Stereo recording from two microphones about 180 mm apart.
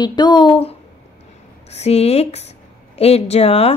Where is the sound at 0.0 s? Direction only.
25° left (ahead or behind).